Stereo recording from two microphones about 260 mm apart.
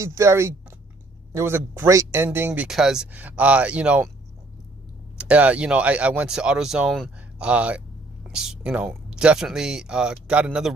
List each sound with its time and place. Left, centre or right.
0.0 s speech: centre
5.1 s speech: centre